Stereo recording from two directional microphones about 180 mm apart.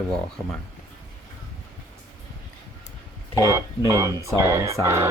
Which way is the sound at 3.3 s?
15° right (ahead or behind).